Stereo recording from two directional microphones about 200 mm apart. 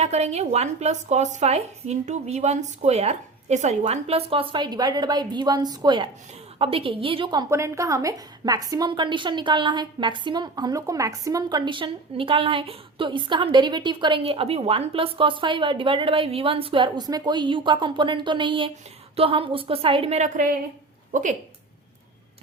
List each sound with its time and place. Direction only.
0.0 s a woman's voice: 35° right (ahead or behind)